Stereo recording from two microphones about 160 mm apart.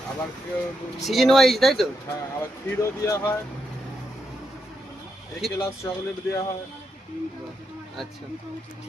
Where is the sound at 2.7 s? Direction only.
15° left (ahead or behind).